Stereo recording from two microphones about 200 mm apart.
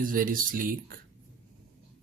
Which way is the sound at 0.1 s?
45° right (ahead or behind).